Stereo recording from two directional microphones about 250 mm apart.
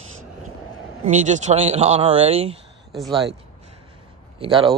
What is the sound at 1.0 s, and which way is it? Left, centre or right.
Speech, right.